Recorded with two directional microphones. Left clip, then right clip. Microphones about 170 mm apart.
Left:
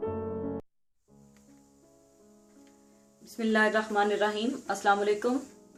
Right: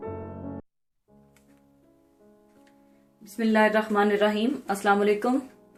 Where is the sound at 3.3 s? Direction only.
60° right (ahead or behind).